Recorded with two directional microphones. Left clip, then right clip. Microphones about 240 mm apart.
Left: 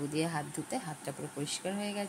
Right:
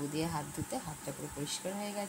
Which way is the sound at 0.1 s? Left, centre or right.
Left.